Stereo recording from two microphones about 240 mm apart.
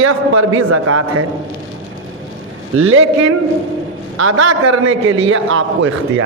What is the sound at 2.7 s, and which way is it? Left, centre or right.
A man's voice, right.